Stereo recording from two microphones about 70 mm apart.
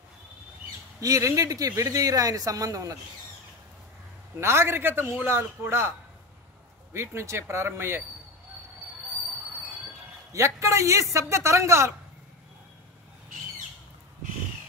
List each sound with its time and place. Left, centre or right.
1.0 s speech: right
4.4 s speech: right
10.3 s a man's voice: right